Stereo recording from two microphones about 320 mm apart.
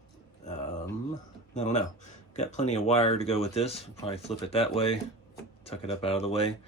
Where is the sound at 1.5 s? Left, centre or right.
Left.